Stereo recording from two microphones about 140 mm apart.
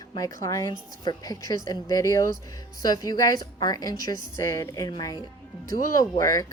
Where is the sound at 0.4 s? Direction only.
25° left (ahead or behind).